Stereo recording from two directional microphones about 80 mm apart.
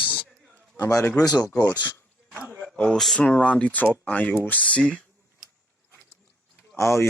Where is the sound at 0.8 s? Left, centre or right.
Left.